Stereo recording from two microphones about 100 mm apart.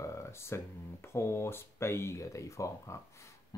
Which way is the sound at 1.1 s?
25° left (ahead or behind).